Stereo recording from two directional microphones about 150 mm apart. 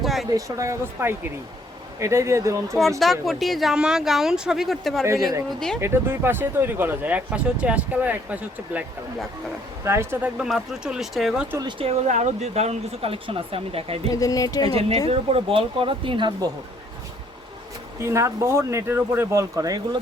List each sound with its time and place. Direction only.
0.0 s a sound: centre (ahead or behind)
0.3 s speech: 20° right (ahead or behind)
3.0 s speech: centre (ahead or behind)
5.8 s speech: 15° right (ahead or behind)
9.8 s speech: 15° right (ahead or behind); by 11.4 s centre (ahead or behind)
11.6 s speech: 40° right (ahead or behind)
14.1 s speech: 25° left (ahead or behind)
15.1 s speech: 40° right (ahead or behind)
18.0 s speech: 20° right (ahead or behind)